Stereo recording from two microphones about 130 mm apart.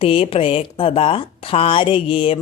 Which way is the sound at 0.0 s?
45° left (ahead or behind).